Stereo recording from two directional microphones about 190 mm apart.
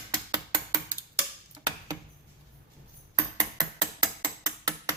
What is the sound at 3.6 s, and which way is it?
Mechanisms, 20° right (ahead or behind).